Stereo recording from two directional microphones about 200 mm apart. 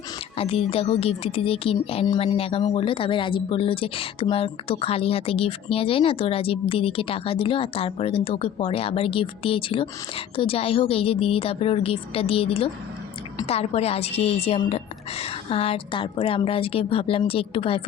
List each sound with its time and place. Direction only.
0.3 s a woman's voice: 30° left (ahead or behind)